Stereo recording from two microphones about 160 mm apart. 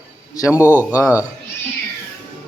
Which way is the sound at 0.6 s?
10° right (ahead or behind).